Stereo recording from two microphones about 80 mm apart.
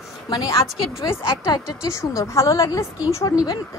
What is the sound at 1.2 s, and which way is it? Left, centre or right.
Speech, left.